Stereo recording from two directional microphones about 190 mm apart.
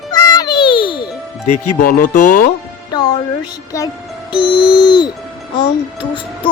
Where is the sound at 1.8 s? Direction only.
45° left (ahead or behind).